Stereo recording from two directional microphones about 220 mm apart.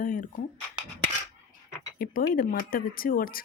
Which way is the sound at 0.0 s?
40° left (ahead or behind).